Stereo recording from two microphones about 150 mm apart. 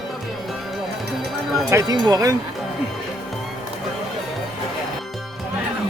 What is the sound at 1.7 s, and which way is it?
Speech, 20° right (ahead or behind).